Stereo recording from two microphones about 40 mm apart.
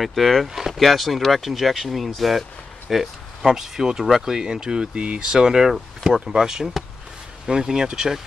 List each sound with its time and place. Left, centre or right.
0.0 s speech: centre; by 5.3 s right
5.3 s speech: centre